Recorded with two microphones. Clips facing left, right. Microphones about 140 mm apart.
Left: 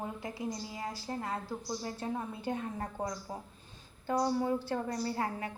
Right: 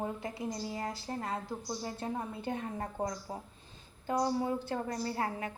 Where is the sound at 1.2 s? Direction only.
25° right (ahead or behind).